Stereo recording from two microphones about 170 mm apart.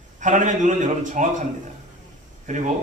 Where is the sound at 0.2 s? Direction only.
50° right (ahead or behind).